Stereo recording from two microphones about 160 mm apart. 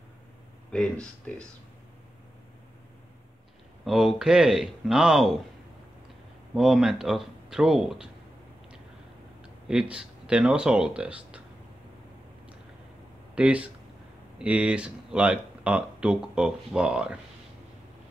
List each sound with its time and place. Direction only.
0.7 s speech: 5° left (ahead or behind)
3.8 s speech: centre (ahead or behind)
6.5 s speech: centre (ahead or behind)
9.4 s speech: 5° right (ahead or behind)
13.3 s speech: 10° right (ahead or behind)